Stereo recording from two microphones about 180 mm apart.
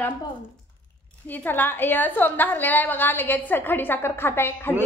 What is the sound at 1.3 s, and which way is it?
A woman's voice, 10° left (ahead or behind).